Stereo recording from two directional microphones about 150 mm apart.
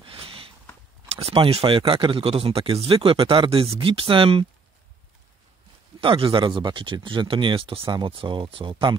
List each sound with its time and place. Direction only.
0.0 s a sound: 40° right (ahead or behind)
1.2 s speech: 40° right (ahead or behind)
5.9 s speech: 35° right (ahead or behind)